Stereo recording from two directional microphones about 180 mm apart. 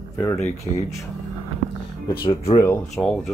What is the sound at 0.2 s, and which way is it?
Speech, 15° left (ahead or behind).